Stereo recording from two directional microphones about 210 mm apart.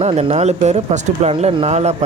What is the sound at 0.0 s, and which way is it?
Speech, 30° right (ahead or behind).